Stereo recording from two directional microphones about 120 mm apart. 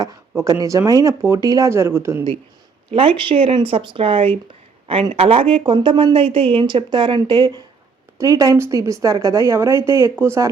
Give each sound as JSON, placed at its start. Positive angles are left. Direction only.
{"t": 0.0, "sound": "a sound", "side_deg": -30}
{"t": 0.6, "sound": "a woman's voice", "side_deg": -25}
{"t": 2.9, "sound": "a woman's voice", "side_deg": -45}